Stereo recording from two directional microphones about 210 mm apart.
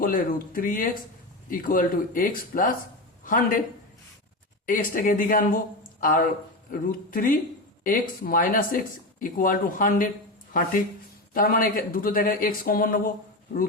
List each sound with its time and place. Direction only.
0.0 s speech: 40° left (ahead or behind)
4.6 s speech: 40° left (ahead or behind)
11.3 s speech: 45° left (ahead or behind)